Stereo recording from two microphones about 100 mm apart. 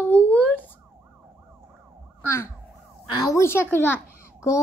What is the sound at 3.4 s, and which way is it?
Speech, 25° left (ahead or behind).